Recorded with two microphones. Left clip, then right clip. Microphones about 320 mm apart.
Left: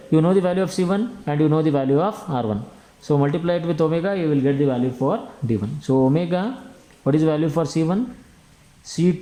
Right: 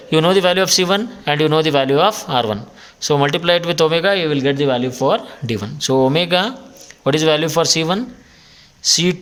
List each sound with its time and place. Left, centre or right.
0.1 s speech: right